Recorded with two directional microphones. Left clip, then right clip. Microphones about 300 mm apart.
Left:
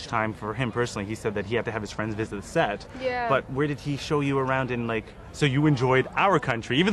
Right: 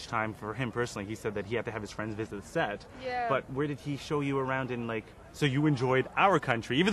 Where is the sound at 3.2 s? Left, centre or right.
Centre.